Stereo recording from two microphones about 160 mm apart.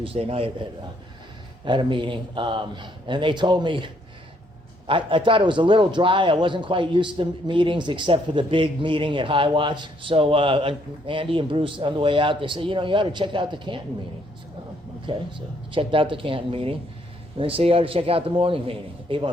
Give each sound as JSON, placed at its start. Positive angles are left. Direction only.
{"t": 0.0, "sound": "a man's voice", "side_deg": -35}
{"t": 15.0, "sound": "a man's voice", "side_deg": -30}